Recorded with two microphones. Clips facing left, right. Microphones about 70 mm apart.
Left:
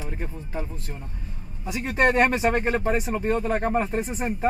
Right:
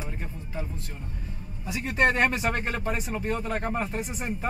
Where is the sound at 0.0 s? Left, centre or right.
Left.